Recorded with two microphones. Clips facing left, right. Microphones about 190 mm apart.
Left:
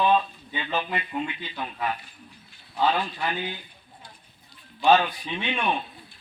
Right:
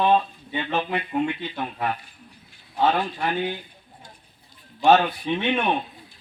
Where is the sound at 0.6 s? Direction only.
60° right (ahead or behind).